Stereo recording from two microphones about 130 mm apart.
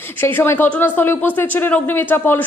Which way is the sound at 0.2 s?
15° left (ahead or behind).